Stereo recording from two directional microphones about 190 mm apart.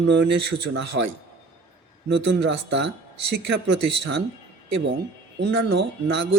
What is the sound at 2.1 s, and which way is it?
Speech, 65° right (ahead or behind).